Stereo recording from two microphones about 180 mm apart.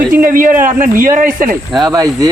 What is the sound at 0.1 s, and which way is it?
Speech, 50° right (ahead or behind).